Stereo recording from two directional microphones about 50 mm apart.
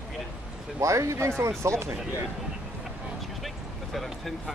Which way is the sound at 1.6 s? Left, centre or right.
Right.